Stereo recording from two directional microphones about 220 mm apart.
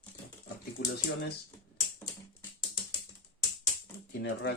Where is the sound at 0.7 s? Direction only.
45° left (ahead or behind).